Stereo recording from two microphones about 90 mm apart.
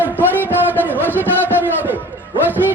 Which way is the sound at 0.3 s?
20° right (ahead or behind).